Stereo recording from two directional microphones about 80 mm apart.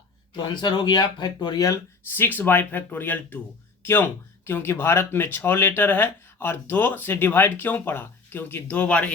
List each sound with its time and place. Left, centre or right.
0.3 s speech: left
1.5 s speech: left
2.0 s speech: left